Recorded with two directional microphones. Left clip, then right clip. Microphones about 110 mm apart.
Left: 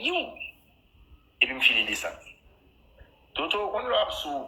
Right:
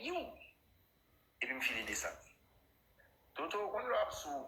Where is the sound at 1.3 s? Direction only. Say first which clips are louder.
Left 16 dB; 25° left (ahead or behind).